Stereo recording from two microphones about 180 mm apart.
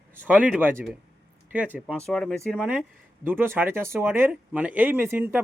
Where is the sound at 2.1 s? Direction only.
5° left (ahead or behind).